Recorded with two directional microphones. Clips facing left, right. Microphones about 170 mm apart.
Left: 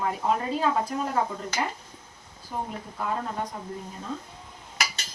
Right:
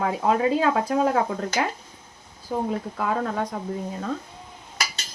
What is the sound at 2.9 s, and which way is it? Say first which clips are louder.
Speech: right 2 dB; 90° right.